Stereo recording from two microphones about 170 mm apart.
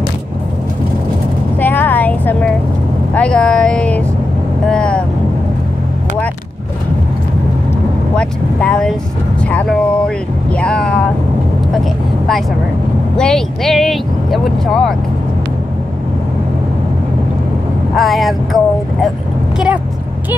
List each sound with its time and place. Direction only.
1.6 s a sound: 10° left (ahead or behind)
4.6 s vehicle: 5° left (ahead or behind)
8.2 s speech: 5° left (ahead or behind)
13.1 s speech: 5° left (ahead or behind)
17.9 s speech: centre (ahead or behind)